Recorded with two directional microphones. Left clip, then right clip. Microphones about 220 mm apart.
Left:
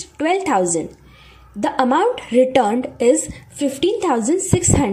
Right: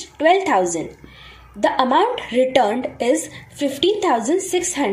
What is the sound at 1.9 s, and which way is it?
A woman's voice, 45° left (ahead or behind).